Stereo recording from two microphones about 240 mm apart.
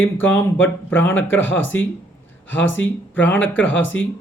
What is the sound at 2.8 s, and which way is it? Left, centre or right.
Speech, centre.